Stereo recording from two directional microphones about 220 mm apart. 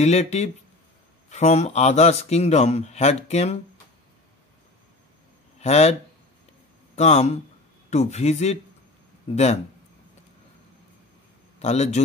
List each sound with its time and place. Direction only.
0.0 s a man's voice: 30° left (ahead or behind)
5.6 s speech: 30° left (ahead or behind)
7.0 s a man's voice: 30° left (ahead or behind)
11.6 s a man's voice: 30° left (ahead or behind)